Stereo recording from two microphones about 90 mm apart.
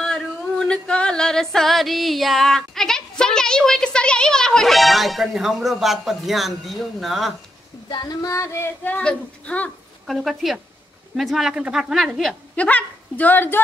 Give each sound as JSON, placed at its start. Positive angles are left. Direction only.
{"t": 0.0, "sound": "a sound", "side_deg": 5}
{"t": 7.9, "sound": "female singing", "side_deg": 45}
{"t": 8.8, "sound": "speech", "side_deg": 15}
{"t": 10.0, "sound": "speech", "side_deg": 0}
{"t": 12.5, "sound": "speech", "side_deg": 15}